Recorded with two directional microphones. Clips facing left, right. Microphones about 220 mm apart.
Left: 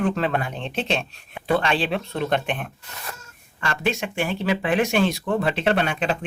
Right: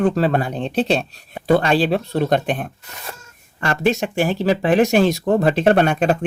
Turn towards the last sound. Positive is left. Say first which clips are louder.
# right 7 dB
turn(degrees=-50)  # may be behind; listen again after turning